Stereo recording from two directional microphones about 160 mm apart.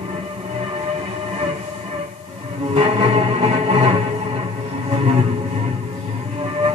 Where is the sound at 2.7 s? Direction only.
40° right (ahead or behind).